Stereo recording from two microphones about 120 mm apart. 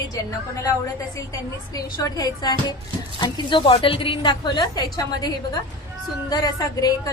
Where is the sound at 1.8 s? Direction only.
30° left (ahead or behind).